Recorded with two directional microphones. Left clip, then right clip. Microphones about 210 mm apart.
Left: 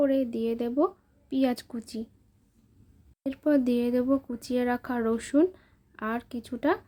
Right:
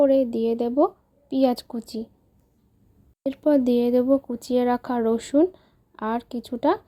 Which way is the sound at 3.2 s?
20° right (ahead or behind).